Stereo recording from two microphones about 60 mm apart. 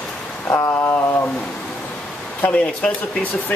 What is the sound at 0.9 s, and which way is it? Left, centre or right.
Speech, left.